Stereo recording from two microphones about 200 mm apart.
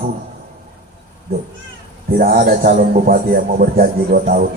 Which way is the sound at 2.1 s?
45° right (ahead or behind).